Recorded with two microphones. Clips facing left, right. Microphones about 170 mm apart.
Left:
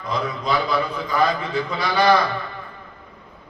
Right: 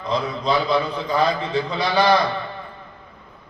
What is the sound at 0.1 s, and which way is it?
A man's voice, 25° right (ahead or behind).